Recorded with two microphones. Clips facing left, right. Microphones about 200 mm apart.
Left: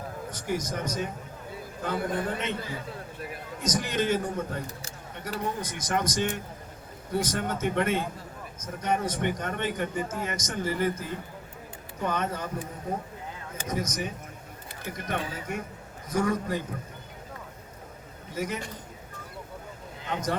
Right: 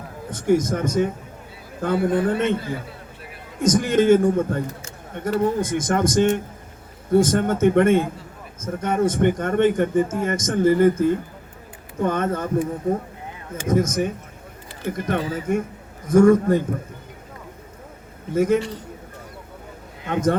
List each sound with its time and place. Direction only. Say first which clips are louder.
0.3 s a man's voice: right 13 dB; 50° right (ahead or behind)
18.3 s a man's voice: right 14 dB; 50° right (ahead or behind)